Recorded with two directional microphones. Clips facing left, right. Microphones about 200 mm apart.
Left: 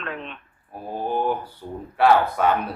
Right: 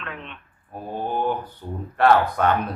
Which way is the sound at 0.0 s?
35° left (ahead or behind).